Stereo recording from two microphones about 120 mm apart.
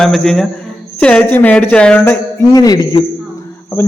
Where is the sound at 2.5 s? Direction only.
35° left (ahead or behind).